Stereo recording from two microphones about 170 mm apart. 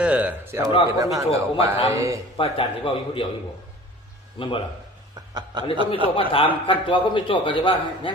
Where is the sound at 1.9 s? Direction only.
20° right (ahead or behind).